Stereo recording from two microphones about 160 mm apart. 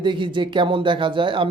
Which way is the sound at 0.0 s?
30° right (ahead or behind).